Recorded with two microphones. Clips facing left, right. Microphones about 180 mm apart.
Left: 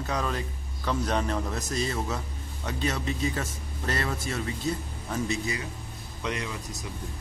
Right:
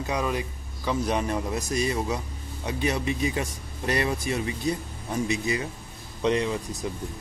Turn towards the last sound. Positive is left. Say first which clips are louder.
# right 8 dB
turn(degrees=-30)  # may be behind; listen again after turning